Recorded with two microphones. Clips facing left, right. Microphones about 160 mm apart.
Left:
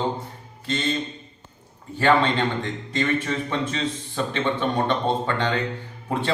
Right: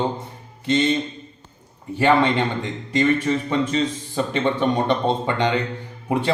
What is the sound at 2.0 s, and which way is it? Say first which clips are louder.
Speech: right 2 dB; 10° right (ahead or behind).